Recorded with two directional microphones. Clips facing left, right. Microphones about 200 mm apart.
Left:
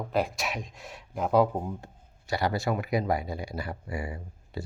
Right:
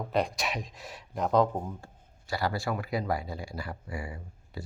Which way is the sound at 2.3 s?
20° left (ahead or behind).